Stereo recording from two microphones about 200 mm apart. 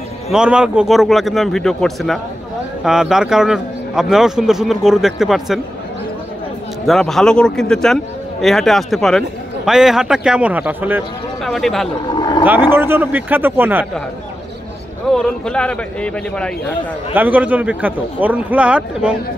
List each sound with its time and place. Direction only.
0.3 s a man's voice: 5° right (ahead or behind)
6.9 s a man's voice: centre (ahead or behind)
11.4 s a man's voice: centre (ahead or behind)
12.1 s speech: 20° left (ahead or behind)
12.7 s a man's voice: 10° right (ahead or behind)
15.0 s a man's voice: 5° left (ahead or behind)
17.1 s a man's voice: 10° right (ahead or behind)